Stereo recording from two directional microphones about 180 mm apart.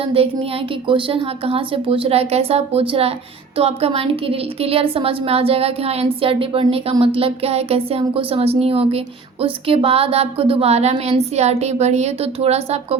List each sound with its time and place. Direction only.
0.2 s a woman's voice: 35° right (ahead or behind)